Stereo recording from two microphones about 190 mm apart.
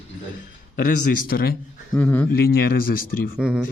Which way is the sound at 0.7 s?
45° left (ahead or behind).